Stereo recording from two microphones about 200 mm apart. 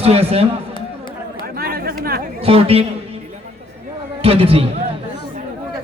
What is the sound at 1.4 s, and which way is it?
Chatter, 50° right (ahead or behind).